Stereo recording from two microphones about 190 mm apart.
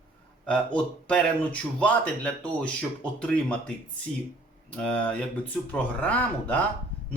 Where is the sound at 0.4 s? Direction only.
5° left (ahead or behind).